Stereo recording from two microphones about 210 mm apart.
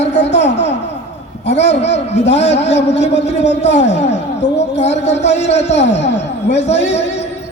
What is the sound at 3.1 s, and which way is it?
A man's voice, 55° left (ahead or behind).